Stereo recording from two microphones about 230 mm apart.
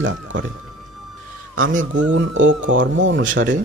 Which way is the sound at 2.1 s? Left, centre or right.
Right.